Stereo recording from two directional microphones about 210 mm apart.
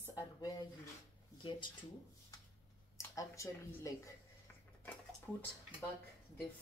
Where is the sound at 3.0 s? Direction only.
15° left (ahead or behind).